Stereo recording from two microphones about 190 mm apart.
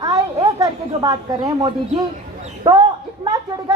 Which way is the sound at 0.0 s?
20° right (ahead or behind).